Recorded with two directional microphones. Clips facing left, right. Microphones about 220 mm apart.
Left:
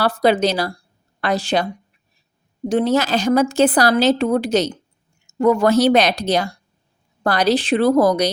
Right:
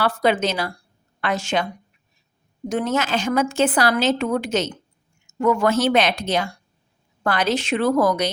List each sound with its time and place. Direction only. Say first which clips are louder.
0.0 s a woman's voice: left 4 dB; 35° left (ahead or behind)
2.6 s a woman's voice: left 5 dB; 30° left (ahead or behind)